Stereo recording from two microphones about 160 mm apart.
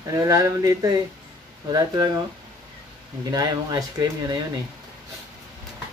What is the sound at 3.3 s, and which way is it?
Speech, 25° right (ahead or behind).